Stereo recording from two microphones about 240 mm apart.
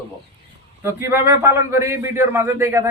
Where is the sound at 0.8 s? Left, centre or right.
Centre.